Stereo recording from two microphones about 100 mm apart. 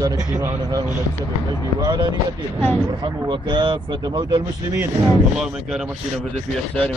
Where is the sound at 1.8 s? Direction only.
50° right (ahead or behind).